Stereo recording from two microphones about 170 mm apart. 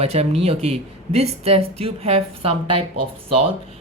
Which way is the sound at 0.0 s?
35° right (ahead or behind).